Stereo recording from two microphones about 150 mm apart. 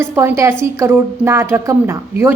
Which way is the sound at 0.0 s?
20° right (ahead or behind).